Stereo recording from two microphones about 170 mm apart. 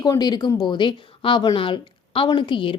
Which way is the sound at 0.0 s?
25° left (ahead or behind).